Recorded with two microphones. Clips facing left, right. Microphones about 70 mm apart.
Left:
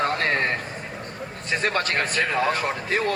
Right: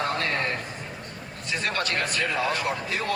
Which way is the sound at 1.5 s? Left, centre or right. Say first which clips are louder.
Left 4 dB; left.